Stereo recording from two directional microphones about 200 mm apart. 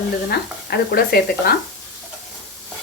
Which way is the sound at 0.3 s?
50° left (ahead or behind).